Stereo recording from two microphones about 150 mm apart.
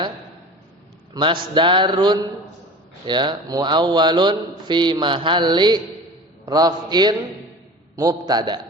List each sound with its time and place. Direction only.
1.1 s a man's voice: 30° right (ahead or behind)